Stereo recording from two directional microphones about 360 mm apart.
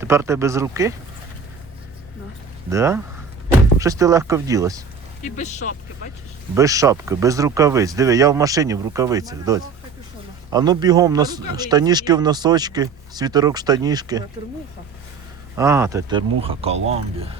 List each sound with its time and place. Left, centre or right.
0.0 s speech: centre
2.6 s speech: centre
5.2 s speech: centre
6.5 s speech: centre
15.5 s speech: centre